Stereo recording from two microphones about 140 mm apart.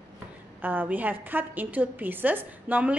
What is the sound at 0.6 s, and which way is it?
A woman's voice, 15° right (ahead or behind).